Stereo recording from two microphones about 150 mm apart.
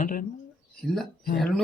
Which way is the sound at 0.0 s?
65° left (ahead or behind).